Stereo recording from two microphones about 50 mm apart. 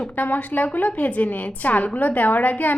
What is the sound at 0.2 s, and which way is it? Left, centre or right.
A woman's voice, left.